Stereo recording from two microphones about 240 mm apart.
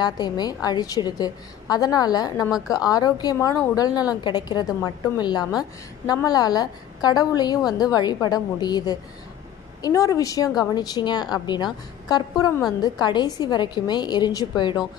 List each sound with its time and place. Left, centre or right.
0.0 s a woman's voice: centre